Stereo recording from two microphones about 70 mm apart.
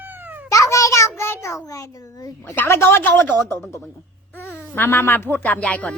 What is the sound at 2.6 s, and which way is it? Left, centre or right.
Speech, left.